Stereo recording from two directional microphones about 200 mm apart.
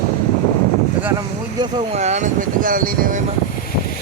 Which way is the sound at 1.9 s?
35° right (ahead or behind).